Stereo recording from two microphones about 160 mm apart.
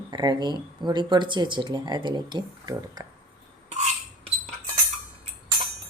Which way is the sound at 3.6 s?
45° right (ahead or behind).